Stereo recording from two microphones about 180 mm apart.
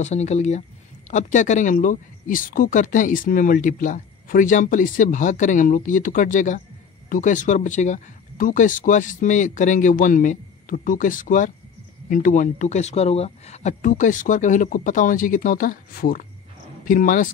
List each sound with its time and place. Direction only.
0.0 s speech: 40° left (ahead or behind)